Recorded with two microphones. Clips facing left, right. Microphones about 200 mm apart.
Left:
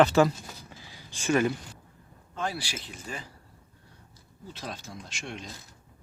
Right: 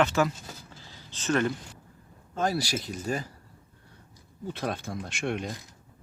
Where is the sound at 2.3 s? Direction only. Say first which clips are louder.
Right 6 dB; 40° right (ahead or behind).